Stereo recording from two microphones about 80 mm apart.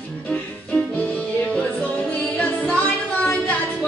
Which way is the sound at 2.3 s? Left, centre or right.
Centre.